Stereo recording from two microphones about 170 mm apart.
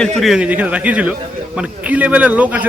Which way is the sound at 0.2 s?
5° right (ahead or behind).